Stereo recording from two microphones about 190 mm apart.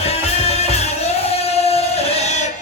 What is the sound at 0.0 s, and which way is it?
Music, 35° left (ahead or behind).